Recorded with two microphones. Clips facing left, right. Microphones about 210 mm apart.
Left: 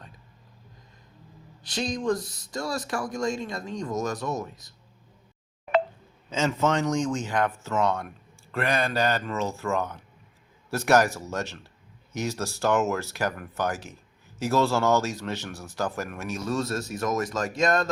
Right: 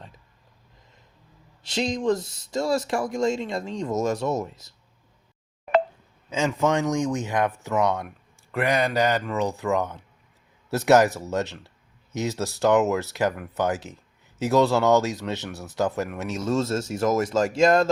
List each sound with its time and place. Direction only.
1.6 s speech: 25° right (ahead or behind)
6.3 s speech: 10° right (ahead or behind)